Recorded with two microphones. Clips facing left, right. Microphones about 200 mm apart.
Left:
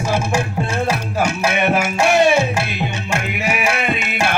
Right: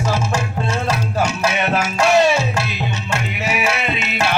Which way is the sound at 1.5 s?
55° left (ahead or behind).